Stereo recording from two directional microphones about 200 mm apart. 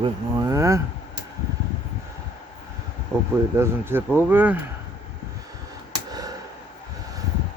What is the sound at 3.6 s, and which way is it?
Speech, 10° right (ahead or behind).